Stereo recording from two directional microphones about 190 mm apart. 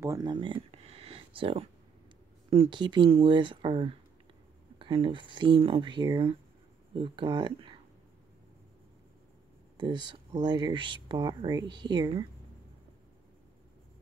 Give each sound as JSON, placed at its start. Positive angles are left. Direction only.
{"t": 0.0, "sound": "a sound", "side_deg": -20}
{"t": 2.5, "sound": "speech", "side_deg": -25}
{"t": 9.8, "sound": "speech", "side_deg": -25}